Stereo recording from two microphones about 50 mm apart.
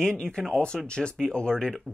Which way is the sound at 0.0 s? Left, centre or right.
Centre.